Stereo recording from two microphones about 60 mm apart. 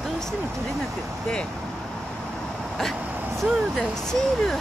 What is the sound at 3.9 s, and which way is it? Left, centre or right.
Speech, centre.